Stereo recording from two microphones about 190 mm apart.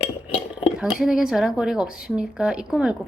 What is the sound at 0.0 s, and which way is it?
Dishes, 30° left (ahead or behind).